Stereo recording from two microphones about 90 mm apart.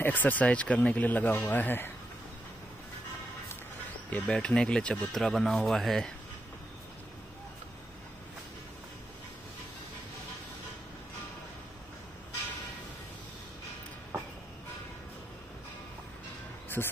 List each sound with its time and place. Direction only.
0.0 s speech: 20° left (ahead or behind)
4.1 s speech: 10° left (ahead or behind)
5.1 s speech: 5° left (ahead or behind)